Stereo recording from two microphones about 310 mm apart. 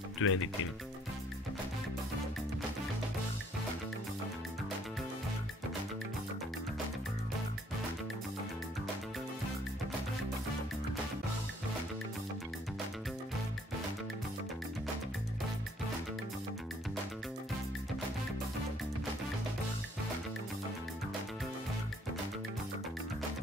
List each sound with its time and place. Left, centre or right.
0.2 s speech: left